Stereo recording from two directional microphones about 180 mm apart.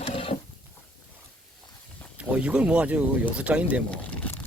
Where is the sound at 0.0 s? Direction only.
30° left (ahead or behind).